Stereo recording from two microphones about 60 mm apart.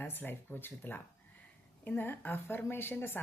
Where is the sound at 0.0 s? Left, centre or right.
Left.